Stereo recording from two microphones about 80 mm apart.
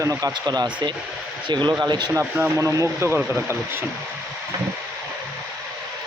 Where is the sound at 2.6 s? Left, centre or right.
Right.